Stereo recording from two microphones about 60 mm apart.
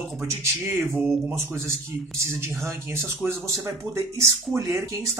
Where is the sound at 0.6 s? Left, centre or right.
Right.